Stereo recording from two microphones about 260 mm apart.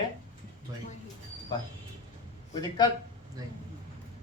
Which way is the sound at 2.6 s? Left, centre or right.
Centre.